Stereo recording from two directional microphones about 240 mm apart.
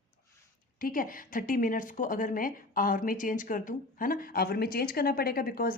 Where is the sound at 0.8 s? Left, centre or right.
Left.